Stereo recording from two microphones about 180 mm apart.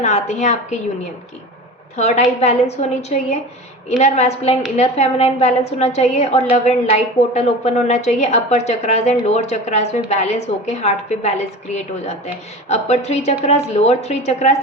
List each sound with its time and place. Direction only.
0.0 s a woman's voice: 40° left (ahead or behind)
2.0 s a woman's voice: 40° left (ahead or behind)